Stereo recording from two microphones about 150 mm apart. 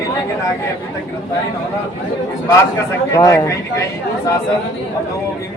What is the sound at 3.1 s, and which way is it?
Speech, 20° left (ahead or behind).